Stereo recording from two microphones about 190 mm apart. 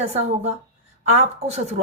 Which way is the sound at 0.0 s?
35° right (ahead or behind).